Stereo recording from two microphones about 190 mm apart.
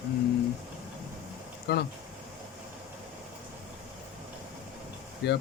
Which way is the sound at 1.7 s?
60° left (ahead or behind).